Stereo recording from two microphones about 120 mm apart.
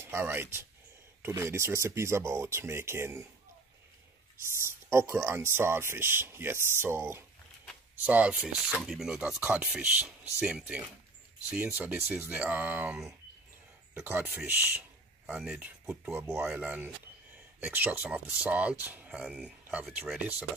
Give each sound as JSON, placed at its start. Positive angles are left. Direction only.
{"t": 0.0, "sound": "speech", "side_deg": -20}
{"t": 4.9, "sound": "speech", "side_deg": -20}